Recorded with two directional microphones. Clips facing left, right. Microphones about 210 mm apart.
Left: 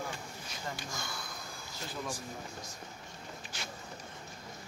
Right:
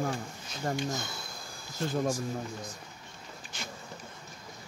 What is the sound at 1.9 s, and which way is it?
Speech, 45° right (ahead or behind).